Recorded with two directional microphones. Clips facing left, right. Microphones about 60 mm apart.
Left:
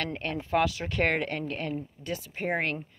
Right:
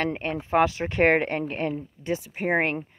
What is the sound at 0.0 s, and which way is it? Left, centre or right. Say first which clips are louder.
Speech: right 5 dB; right.